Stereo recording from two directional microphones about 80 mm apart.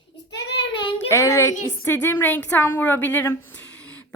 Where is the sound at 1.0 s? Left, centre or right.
Left.